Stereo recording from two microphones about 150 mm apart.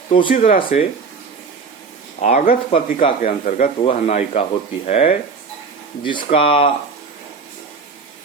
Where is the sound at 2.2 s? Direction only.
55° left (ahead or behind).